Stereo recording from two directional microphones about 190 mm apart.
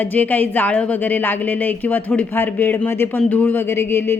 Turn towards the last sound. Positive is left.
turn(degrees=10)  # may be behind; listen again after turning